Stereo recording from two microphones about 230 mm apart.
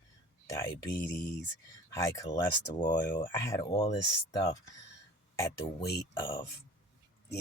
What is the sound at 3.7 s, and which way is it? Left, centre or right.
Speech, left.